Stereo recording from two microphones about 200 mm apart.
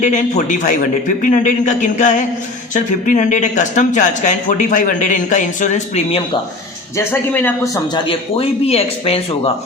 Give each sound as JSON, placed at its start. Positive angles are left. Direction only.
{"t": 0.0, "sound": "speech", "side_deg": 35}
{"t": 6.9, "sound": "speech", "side_deg": 10}